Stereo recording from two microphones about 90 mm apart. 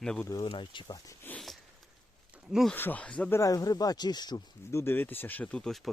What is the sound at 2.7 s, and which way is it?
Speech, 20° left (ahead or behind).